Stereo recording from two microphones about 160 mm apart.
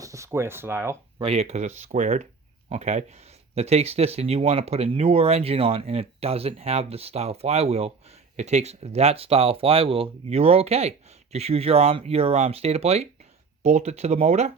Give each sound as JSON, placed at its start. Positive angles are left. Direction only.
{"t": 0.0, "sound": "speech", "side_deg": -20}
{"t": 1.2, "sound": "speech", "side_deg": -40}